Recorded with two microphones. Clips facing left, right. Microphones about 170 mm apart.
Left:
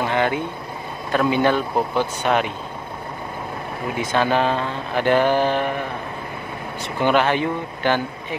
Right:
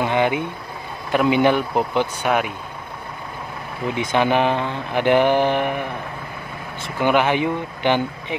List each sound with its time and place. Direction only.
0.0 s speech: 15° right (ahead or behind)
3.9 s speech: 15° right (ahead or behind)
7.0 s speech: 15° right (ahead or behind)